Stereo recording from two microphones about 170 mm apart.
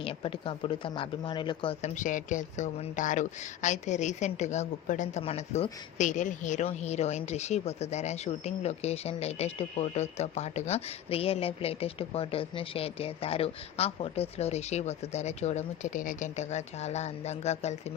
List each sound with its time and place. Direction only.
0.0 s speech: 30° left (ahead or behind)
1.8 s speech: 50° left (ahead or behind)